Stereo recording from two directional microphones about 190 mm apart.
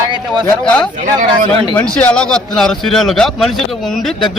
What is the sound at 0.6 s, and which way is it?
A man's voice, 5° left (ahead or behind).